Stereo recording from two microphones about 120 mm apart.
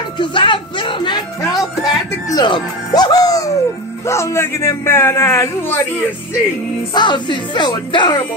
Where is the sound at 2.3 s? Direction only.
35° left (ahead or behind); by 5.8 s 20° left (ahead or behind).